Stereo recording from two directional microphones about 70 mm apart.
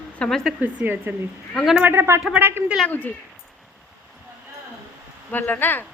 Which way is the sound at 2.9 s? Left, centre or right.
Left.